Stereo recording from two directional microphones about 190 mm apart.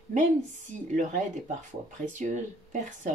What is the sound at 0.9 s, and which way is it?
Speech, 40° right (ahead or behind).